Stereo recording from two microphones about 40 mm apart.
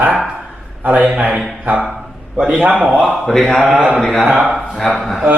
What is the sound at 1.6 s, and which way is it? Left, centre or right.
Speech, right.